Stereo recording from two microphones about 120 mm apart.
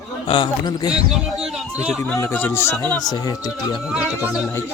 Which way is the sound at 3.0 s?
30° left (ahead or behind).